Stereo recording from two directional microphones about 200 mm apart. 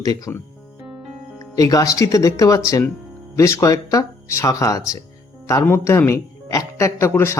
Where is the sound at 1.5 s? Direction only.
15° left (ahead or behind).